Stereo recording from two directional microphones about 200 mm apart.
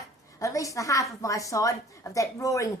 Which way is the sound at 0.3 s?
15° left (ahead or behind).